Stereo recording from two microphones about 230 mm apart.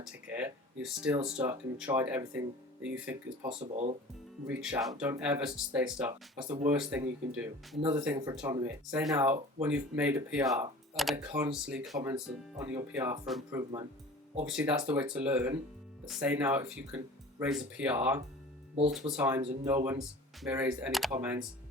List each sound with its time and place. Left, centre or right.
0.1 s speech: centre
3.4 s speech: right
4.4 s speech: centre
7.8 s speech: centre
11.0 s speech: centre
11.9 s speech: centre